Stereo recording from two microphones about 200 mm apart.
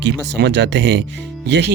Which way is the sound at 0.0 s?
60° right (ahead or behind).